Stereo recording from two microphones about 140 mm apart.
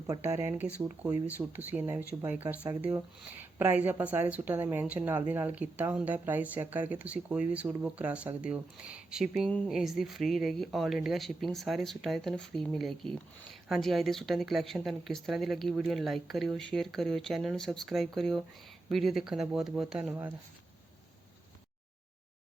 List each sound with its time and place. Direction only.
0.1 s a woman's voice: 25° right (ahead or behind); by 20.1 s 5° right (ahead or behind)